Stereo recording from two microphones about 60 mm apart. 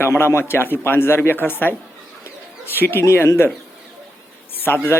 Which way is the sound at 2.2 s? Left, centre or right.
Left.